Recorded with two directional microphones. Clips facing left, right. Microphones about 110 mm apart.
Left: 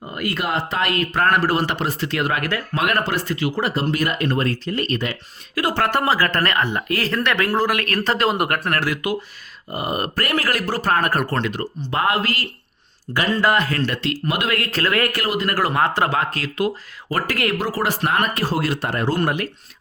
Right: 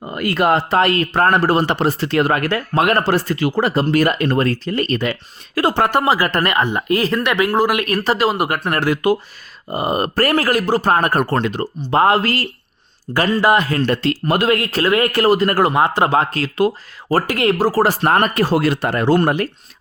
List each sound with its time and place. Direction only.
0.1 s speech: 45° right (ahead or behind)
5.7 s speech: 15° right (ahead or behind)
8.6 s speech: 25° right (ahead or behind)
13.3 s speech: 15° right (ahead or behind)
13.9 s speech: 40° right (ahead or behind)
14.5 s speech: 20° right (ahead or behind)
17.7 s speech: 40° right (ahead or behind)
18.4 s speech: 65° right (ahead or behind)
19.2 s speech: 35° right (ahead or behind)